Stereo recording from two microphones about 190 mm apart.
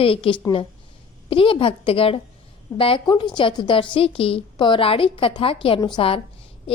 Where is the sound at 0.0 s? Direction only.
30° left (ahead or behind).